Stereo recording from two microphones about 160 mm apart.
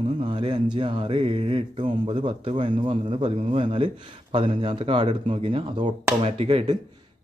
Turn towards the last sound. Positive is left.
turn(degrees=-35)  # may be behind; listen again after turning